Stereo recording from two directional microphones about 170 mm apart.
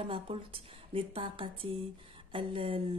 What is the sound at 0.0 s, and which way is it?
Speech, 35° right (ahead or behind).